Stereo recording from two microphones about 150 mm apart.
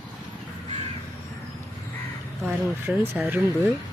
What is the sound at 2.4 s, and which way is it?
Speech, 15° right (ahead or behind).